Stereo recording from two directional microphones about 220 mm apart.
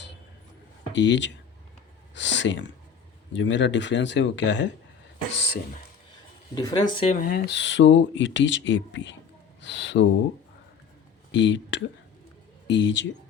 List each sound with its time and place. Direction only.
0.9 s speech: 55° left (ahead or behind)
6.5 s speech: 20° left (ahead or behind)
7.2 s speech: 45° left (ahead or behind)
11.3 s speech: 55° left (ahead or behind)